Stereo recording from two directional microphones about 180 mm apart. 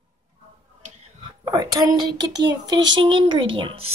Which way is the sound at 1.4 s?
20° right (ahead or behind).